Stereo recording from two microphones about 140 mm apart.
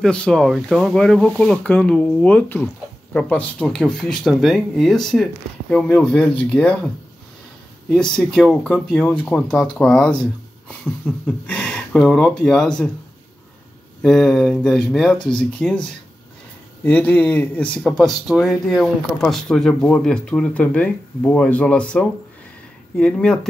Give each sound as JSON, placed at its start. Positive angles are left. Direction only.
{"t": 0.0, "sound": "speech", "side_deg": 5}
{"t": 7.9, "sound": "speech", "side_deg": 5}
{"t": 14.0, "sound": "speech", "side_deg": 5}